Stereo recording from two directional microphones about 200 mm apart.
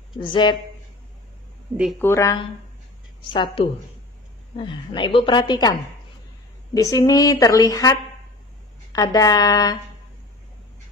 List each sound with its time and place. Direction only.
0.2 s a woman's voice: 25° left (ahead or behind)
2.0 s a woman's voice: 15° left (ahead or behind)